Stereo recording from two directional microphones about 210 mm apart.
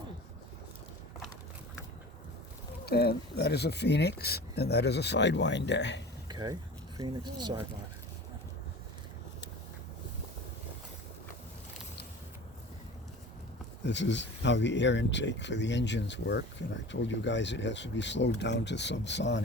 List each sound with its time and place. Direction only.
2.8 s speech: 50° left (ahead or behind)
6.2 s speech: 20° right (ahead or behind)
13.8 s speech: 60° left (ahead or behind)